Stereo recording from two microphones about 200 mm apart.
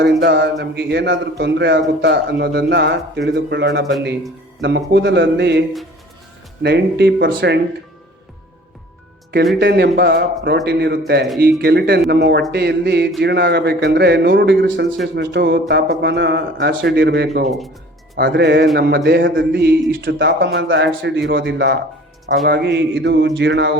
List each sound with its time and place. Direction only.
0.0 s a man's voice: 60° right (ahead or behind)
9.6 s a man's voice: 55° right (ahead or behind)